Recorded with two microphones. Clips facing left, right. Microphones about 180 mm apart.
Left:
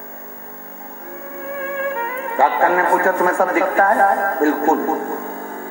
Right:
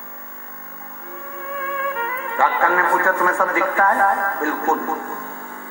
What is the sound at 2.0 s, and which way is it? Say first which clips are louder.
Speech: left 4 dB; 35° left (ahead or behind).